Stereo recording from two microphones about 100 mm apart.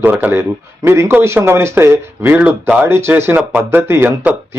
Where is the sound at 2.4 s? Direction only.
10° right (ahead or behind).